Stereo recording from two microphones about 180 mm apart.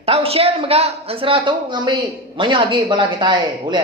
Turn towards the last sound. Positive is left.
turn(degrees=-25)  # may be behind; listen again after turning